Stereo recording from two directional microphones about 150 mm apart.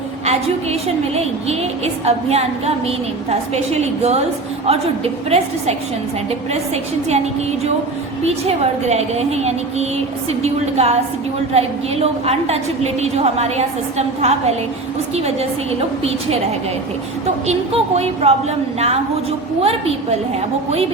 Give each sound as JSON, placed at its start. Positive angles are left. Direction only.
{"t": 0.3, "sound": "a woman's voice", "side_deg": -45}
{"t": 8.2, "sound": "a woman's voice", "side_deg": -45}
{"t": 17.4, "sound": "a woman's voice", "side_deg": -45}